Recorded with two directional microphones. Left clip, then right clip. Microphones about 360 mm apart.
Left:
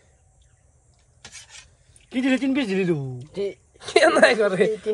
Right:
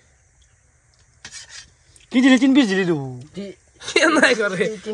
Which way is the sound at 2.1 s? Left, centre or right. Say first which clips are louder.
Right 8 dB; centre.